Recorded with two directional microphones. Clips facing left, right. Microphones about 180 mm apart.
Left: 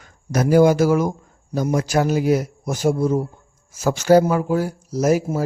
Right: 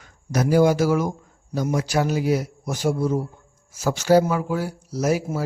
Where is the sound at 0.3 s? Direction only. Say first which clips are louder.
Left 3 dB; 50° left (ahead or behind).